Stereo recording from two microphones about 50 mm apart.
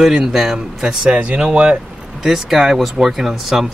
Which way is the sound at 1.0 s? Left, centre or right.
Right.